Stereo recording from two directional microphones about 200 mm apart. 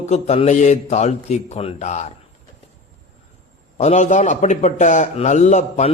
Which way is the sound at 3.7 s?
35° left (ahead or behind).